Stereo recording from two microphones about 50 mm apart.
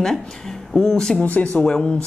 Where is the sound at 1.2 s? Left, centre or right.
Left.